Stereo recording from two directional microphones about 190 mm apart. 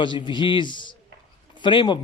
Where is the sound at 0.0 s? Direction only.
25° left (ahead or behind).